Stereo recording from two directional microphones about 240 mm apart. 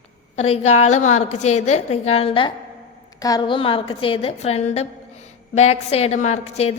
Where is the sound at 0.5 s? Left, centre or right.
Left.